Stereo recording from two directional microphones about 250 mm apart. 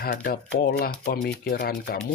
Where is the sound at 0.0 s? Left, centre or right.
Left.